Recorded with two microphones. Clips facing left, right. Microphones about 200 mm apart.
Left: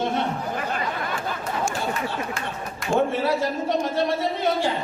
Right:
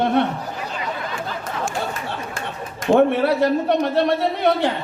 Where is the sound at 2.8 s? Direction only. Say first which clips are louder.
Right 6 dB; 60° right (ahead or behind).